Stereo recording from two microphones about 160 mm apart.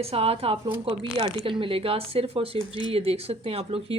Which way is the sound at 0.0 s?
40° right (ahead or behind).